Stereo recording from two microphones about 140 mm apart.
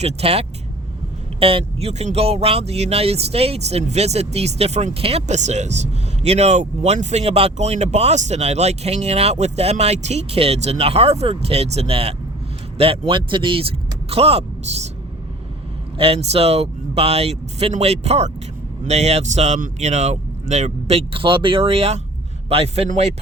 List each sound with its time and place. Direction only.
0.0 s speech: 45° right (ahead or behind)
16.0 s speech: 45° right (ahead or behind)